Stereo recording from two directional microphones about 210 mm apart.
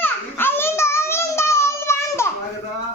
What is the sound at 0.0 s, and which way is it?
Child singing, 10° left (ahead or behind).